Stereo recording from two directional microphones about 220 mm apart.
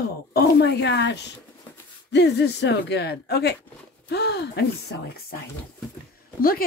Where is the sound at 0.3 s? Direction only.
50° left (ahead or behind).